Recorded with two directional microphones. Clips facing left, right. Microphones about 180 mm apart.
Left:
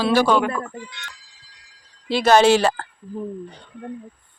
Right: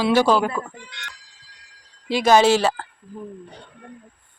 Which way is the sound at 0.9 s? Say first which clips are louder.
Left 1 dB; 75° right (ahead or behind).